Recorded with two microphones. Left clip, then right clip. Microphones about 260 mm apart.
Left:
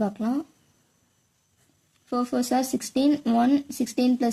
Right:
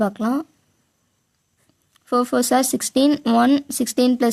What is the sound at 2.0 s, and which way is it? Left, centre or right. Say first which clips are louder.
Speech: right 8 dB; right.